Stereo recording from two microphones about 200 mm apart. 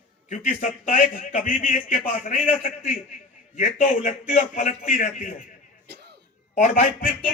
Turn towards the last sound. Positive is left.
turn(degrees=45)  # may be behind; listen again after turning